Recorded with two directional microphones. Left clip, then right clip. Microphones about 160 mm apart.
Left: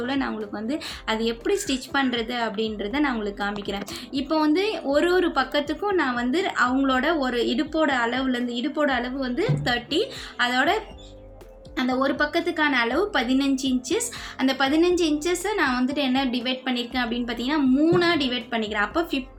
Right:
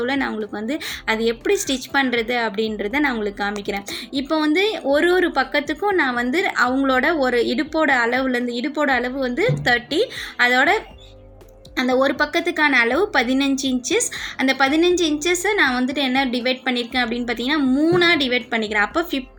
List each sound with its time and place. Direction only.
0.0 s a woman's voice: 20° right (ahead or behind)